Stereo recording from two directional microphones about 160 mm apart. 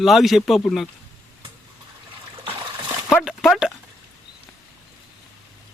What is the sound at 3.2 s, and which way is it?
Speech, centre (ahead or behind).